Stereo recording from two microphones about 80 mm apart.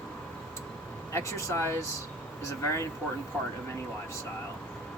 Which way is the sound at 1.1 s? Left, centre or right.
Left.